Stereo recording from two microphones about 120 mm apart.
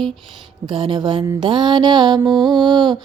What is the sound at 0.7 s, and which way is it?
Music, 45° right (ahead or behind).